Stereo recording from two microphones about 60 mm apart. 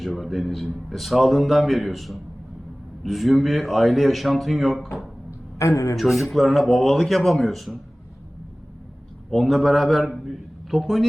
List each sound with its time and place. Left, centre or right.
0.0 s a man's voice: centre
5.5 s a man's voice: left
6.0 s a man's voice: centre
9.3 s a man's voice: centre